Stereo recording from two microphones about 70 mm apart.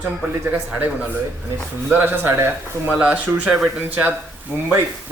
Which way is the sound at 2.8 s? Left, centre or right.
Right.